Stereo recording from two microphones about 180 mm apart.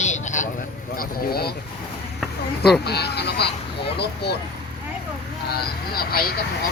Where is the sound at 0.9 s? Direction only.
55° left (ahead or behind).